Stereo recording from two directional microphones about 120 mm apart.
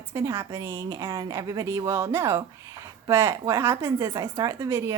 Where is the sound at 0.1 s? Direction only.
25° right (ahead or behind).